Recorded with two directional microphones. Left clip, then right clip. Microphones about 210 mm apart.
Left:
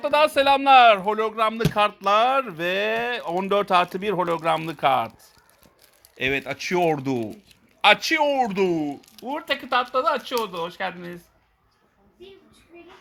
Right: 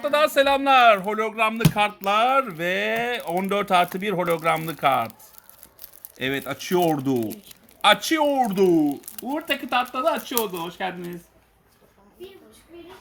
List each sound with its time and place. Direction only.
0.0 s speech: 15° left (ahead or behind)
6.1 s speech: 25° left (ahead or behind)